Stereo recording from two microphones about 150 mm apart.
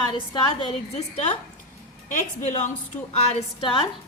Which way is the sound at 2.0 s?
55° left (ahead or behind).